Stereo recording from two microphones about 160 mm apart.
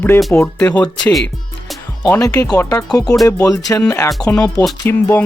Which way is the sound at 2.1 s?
20° left (ahead or behind).